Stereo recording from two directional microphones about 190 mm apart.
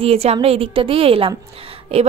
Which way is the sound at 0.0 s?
30° right (ahead or behind).